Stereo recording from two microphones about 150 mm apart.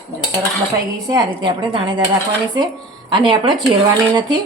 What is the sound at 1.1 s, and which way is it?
Speech, 30° right (ahead or behind).